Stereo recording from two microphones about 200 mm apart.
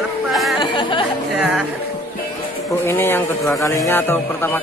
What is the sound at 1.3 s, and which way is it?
Music, 5° right (ahead or behind).